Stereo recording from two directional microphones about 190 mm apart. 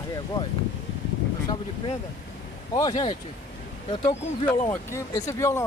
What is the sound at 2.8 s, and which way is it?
Speech, 20° left (ahead or behind).